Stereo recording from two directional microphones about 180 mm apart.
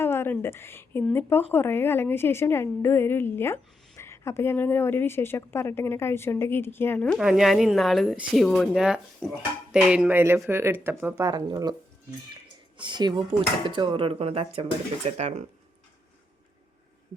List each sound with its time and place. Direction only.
0.0 s a woman's voice: 10° left (ahead or behind); by 11.7 s 20° right (ahead or behind)
12.7 s speech: 25° right (ahead or behind)